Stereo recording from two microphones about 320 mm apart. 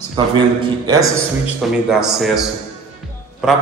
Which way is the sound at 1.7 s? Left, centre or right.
Centre.